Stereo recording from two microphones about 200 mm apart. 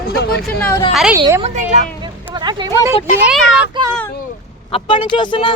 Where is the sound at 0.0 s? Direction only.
50° left (ahead or behind).